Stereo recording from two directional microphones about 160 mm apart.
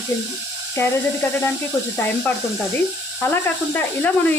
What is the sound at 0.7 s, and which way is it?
Speech, 15° left (ahead or behind).